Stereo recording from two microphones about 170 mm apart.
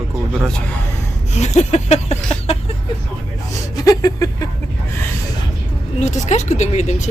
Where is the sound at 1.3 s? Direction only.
40° left (ahead or behind).